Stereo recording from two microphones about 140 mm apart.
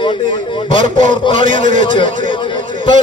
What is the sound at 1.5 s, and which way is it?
Speech, 65° right (ahead or behind).